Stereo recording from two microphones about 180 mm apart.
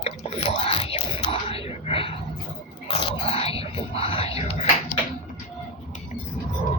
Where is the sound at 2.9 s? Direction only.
30° left (ahead or behind).